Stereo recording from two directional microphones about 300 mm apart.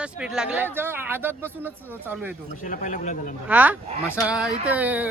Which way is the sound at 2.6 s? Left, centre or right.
Left.